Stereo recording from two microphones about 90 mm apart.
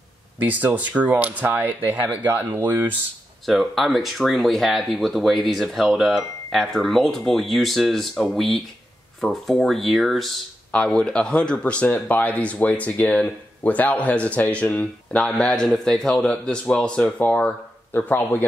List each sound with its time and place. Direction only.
0.4 s speech: 20° right (ahead or behind)
3.4 s speech: centre (ahead or behind)
10.7 s speech: 10° left (ahead or behind)